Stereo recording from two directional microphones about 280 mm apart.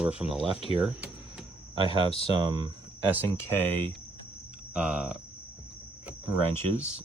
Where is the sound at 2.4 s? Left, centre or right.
Centre.